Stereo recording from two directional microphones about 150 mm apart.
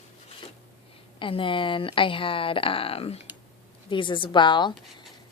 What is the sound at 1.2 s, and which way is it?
Speech, 35° left (ahead or behind).